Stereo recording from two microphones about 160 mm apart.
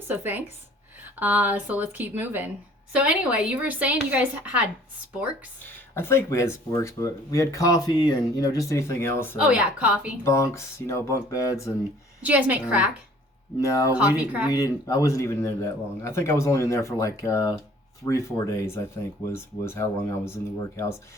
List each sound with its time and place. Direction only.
0.1 s a woman's voice: 10° right (ahead or behind)
5.6 s speech: 15° left (ahead or behind)
9.4 s a woman's voice: 10° right (ahead or behind)
10.2 s speech: 20° left (ahead or behind)
12.2 s a woman's voice: 10° right (ahead or behind)
13.6 s speech: 20° left (ahead or behind)
13.9 s a woman's voice: 10° right (ahead or behind)
14.5 s speech: 20° left (ahead or behind)